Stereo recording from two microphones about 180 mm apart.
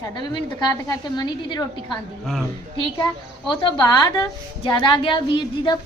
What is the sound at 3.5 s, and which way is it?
A woman's voice, 25° left (ahead or behind).